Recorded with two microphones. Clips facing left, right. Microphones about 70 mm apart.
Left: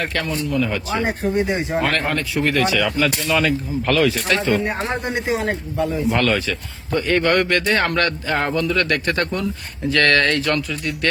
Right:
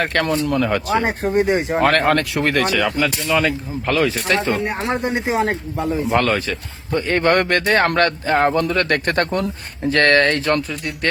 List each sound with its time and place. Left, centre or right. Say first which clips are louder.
0.0 s speech: right 4 dB; right
3.4 s speech: left 1 dB; right
4.6 s speech: right 1 dB; centre
5.0 s a man's voice: right 3 dB; right
9.9 s a man's voice: right 2 dB; right